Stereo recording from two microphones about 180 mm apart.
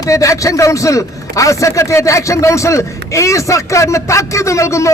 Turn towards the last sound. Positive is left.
turn(degrees=15)  # may be behind; listen again after turning